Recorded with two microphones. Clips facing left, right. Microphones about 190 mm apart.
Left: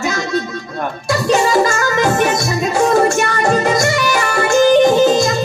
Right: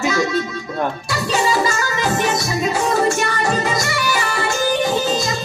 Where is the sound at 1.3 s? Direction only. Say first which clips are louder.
Left 5 dB; 50° left (ahead or behind).